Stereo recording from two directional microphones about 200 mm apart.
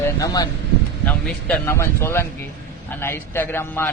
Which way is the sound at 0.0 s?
15° left (ahead or behind).